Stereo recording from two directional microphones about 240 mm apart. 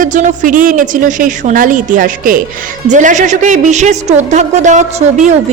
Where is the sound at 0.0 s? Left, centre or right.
Right.